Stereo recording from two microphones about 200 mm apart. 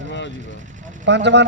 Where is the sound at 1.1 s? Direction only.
60° right (ahead or behind).